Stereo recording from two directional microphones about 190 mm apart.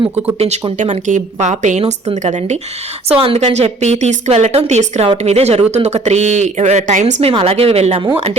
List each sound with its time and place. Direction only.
0.3 s a woman's voice: 35° right (ahead or behind)